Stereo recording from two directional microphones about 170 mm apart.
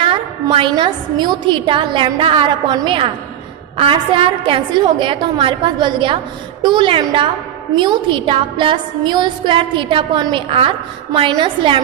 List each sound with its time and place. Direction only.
0.0 s music: 30° right (ahead or behind)